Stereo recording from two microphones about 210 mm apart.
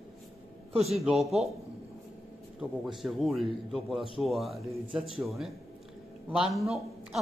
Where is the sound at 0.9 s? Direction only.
Centre (ahead or behind).